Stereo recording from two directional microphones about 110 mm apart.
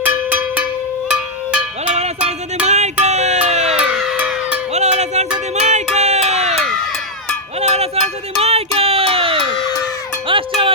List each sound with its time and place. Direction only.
0.0 s cowbell: 15° right (ahead or behind)
1.9 s music: 80° right
2.6 s music: 90° right
3.8 s music: 5° right (ahead or behind)
4.7 s a sound: 90° right
7.6 s music: 75° right (ahead or behind); by 10.4 s 50° right (ahead or behind)